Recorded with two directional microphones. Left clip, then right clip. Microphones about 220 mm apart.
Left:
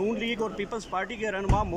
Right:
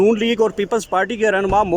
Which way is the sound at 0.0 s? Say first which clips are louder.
Right 13 dB; 50° right (ahead or behind).